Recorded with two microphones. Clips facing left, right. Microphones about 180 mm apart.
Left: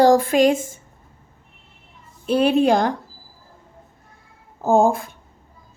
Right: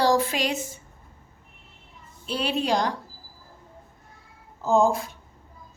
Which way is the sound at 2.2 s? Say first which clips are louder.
Left 10 dB; 50° left (ahead or behind).